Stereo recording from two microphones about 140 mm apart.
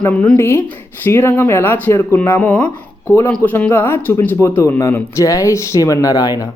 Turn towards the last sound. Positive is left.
turn(degrees=25)  # may be behind; listen again after turning